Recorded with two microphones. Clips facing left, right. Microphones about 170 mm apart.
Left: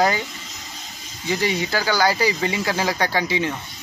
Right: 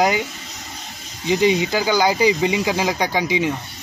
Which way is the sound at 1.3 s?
20° right (ahead or behind).